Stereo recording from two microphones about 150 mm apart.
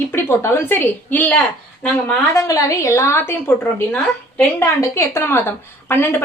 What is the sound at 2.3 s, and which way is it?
A woman's voice, 20° left (ahead or behind).